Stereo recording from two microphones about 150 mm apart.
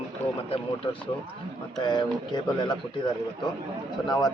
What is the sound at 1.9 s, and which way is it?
Speech, 30° left (ahead or behind).